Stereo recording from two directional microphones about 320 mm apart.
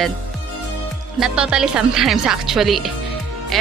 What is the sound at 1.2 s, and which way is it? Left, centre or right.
Speech, centre.